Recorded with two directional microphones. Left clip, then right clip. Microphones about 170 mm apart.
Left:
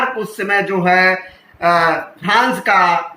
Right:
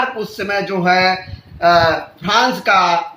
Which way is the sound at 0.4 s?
45° right (ahead or behind).